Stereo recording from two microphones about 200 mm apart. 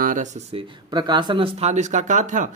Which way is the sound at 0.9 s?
20° right (ahead or behind).